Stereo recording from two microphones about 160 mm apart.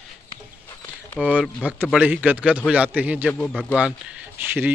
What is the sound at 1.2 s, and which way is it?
Speech, 10° right (ahead or behind).